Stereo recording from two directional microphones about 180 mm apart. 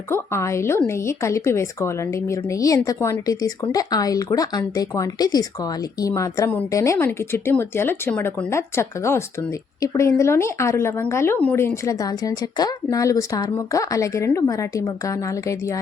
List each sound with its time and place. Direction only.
0.1 s speech: 15° left (ahead or behind)